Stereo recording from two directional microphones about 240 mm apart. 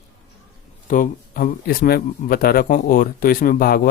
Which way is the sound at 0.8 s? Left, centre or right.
Left.